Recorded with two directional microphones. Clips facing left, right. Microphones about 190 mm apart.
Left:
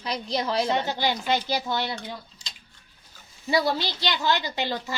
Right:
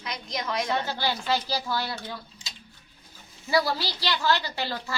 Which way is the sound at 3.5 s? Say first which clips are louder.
Left 1 dB; 20° left (ahead or behind).